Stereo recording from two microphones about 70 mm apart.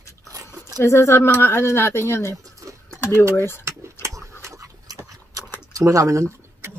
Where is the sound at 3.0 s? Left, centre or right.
Left.